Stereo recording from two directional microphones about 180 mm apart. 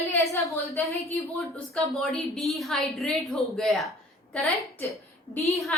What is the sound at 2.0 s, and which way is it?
A woman's voice, centre (ahead or behind).